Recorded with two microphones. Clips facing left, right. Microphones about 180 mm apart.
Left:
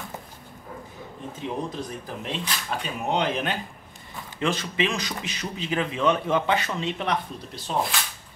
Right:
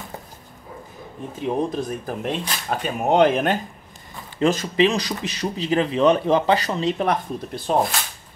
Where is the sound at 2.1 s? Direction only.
45° right (ahead or behind).